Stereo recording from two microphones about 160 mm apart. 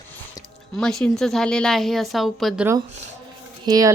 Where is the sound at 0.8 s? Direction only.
5° left (ahead or behind).